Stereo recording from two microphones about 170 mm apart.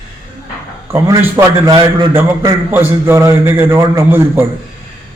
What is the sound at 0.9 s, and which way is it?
A man's voice, 15° right (ahead or behind).